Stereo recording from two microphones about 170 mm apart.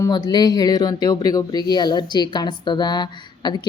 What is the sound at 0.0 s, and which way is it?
A woman's voice, 25° left (ahead or behind).